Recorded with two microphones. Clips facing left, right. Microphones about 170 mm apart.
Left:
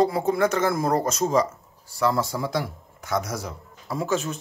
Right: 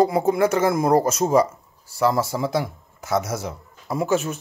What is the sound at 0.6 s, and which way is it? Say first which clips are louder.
Speech: right 4 dB; 20° right (ahead or behind).